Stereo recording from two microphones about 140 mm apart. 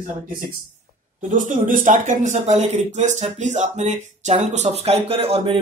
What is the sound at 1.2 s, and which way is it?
Speech, 65° right (ahead or behind).